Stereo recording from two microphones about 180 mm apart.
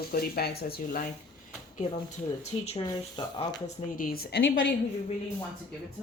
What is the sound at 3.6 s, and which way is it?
Speech, 50° left (ahead or behind).